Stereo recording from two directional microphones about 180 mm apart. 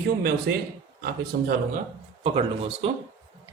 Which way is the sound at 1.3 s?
60° right (ahead or behind).